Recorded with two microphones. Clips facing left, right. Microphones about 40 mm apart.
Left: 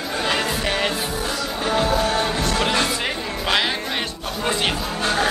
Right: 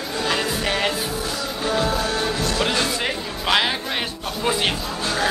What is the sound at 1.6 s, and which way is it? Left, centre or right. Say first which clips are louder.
Music: left 2 dB; left.